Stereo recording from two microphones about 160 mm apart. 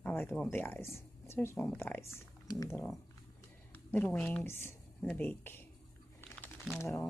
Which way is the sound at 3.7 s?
10° left (ahead or behind).